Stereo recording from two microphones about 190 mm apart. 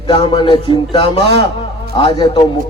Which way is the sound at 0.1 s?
25° left (ahead or behind).